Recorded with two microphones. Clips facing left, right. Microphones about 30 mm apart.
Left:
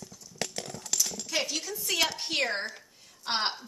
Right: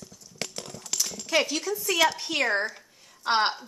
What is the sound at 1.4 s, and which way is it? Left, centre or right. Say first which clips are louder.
Speech: right 5 dB; right.